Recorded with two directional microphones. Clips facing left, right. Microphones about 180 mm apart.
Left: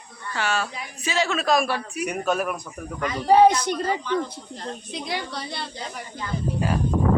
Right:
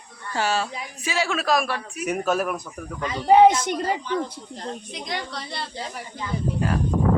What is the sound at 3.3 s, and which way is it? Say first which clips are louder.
Speech: right 1 dB; 20° right (ahead or behind).